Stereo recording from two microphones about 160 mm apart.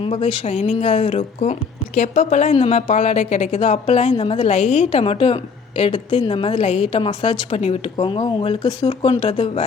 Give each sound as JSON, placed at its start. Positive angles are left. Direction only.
{"t": 0.0, "sound": "a woman's voice", "side_deg": 40}